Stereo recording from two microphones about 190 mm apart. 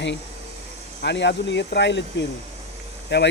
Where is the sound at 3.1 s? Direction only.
65° left (ahead or behind).